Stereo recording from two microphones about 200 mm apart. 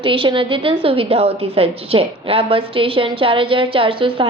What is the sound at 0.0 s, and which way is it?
A woman's voice, 25° right (ahead or behind).